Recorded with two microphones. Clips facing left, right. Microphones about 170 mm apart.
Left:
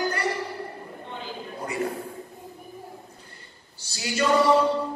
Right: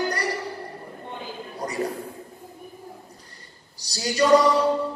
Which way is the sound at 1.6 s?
40° right (ahead or behind).